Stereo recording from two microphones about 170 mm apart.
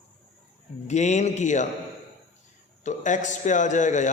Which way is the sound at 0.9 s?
45° left (ahead or behind).